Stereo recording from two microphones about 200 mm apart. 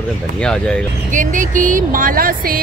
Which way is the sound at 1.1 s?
40° right (ahead or behind).